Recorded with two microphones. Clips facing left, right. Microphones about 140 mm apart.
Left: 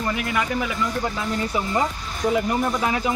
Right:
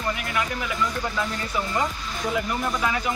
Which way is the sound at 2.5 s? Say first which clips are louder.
Left 3 dB; 25° left (ahead or behind).